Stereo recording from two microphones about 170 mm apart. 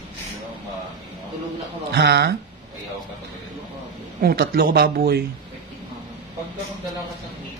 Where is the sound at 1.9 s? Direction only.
70° right (ahead or behind).